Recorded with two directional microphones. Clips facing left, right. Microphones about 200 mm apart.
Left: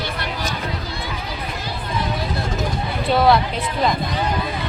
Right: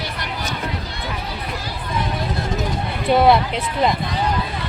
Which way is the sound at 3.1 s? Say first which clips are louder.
Right 2 dB; 20° right (ahead or behind).